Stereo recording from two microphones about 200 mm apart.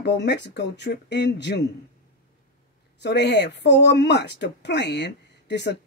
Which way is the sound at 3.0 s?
55° left (ahead or behind).